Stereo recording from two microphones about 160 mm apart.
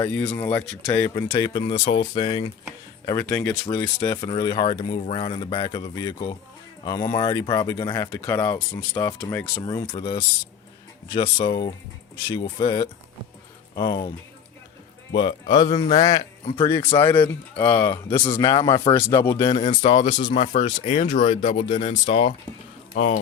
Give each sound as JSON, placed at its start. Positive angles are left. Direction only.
{"t": 0.0, "sound": "speech", "side_deg": 5}
{"t": 0.9, "sound": "speech", "side_deg": 20}
{"t": 3.1, "sound": "speech", "side_deg": 20}
{"t": 10.0, "sound": "speech", "side_deg": 25}
{"t": 15.1, "sound": "speech", "side_deg": 30}
{"t": 15.7, "sound": "speech", "side_deg": 40}
{"t": 17.0, "sound": "speech", "side_deg": 10}
{"t": 18.2, "sound": "speech", "side_deg": 35}
{"t": 19.5, "sound": "speech", "side_deg": 40}